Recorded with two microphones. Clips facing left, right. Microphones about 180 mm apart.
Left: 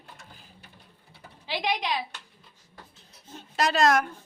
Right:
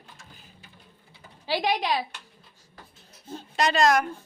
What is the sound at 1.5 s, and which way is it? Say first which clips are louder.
Speech: right 4 dB; 45° right (ahead or behind).